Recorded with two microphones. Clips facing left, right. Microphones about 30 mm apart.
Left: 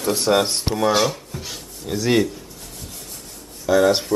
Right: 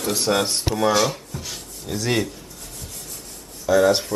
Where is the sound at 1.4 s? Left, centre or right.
Centre.